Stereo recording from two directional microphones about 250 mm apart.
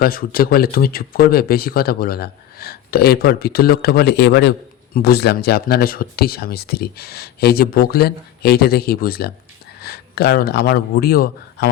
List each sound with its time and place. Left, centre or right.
0.0 s a man's voice: left